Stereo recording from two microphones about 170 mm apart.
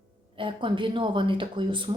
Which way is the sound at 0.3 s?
30° right (ahead or behind).